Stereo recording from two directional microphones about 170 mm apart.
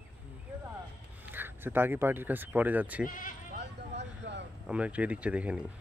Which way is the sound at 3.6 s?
90° right.